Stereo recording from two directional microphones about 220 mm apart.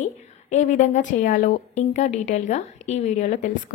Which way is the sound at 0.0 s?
30° left (ahead or behind).